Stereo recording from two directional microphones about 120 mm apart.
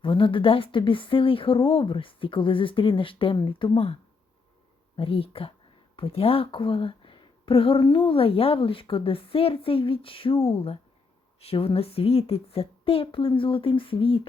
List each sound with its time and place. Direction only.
0.0 s a woman's voice: 45° left (ahead or behind)
4.9 s a woman's voice: 50° left (ahead or behind)